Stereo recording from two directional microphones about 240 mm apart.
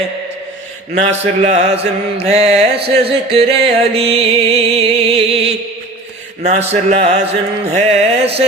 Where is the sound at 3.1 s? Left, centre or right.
Right.